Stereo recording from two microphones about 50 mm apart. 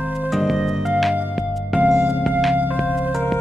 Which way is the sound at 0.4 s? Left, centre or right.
Centre.